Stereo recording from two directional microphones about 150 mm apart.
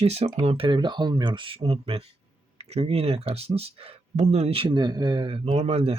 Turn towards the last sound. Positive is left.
turn(degrees=-40)  # may be behind; listen again after turning